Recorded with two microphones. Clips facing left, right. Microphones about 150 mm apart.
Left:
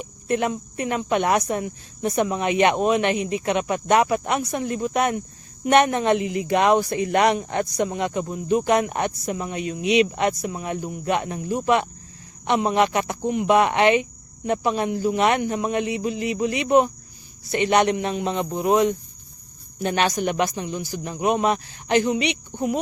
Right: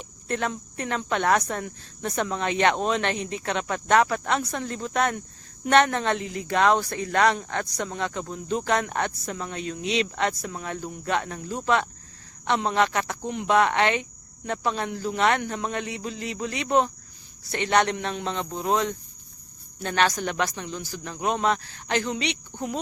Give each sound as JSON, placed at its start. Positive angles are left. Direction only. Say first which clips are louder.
{"t": 0.0, "sound": "speech", "louder": "left 5 dB", "side_deg": 15}